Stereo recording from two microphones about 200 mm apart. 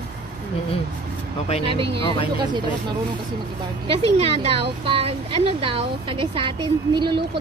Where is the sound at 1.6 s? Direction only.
25° right (ahead or behind).